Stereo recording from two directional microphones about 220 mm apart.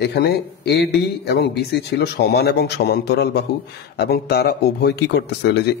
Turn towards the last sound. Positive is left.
turn(degrees=50)  # may be behind; listen again after turning